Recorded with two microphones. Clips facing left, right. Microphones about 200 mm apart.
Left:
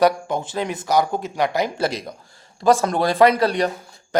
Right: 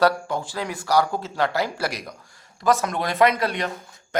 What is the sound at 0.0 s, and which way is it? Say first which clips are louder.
A man's voice: left 3 dB; 20° left (ahead or behind).